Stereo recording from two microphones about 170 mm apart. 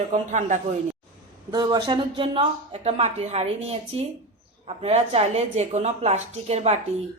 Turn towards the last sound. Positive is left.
turn(degrees=-40)  # may be behind; listen again after turning